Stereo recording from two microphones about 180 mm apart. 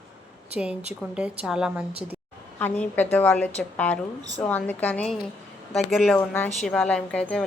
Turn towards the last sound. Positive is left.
turn(degrees=5)  # may be behind; listen again after turning